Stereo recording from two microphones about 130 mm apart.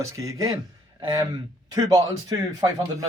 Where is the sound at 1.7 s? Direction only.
25° right (ahead or behind).